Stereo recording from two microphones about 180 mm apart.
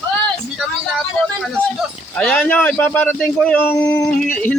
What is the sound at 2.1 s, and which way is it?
A man's voice, 5° left (ahead or behind).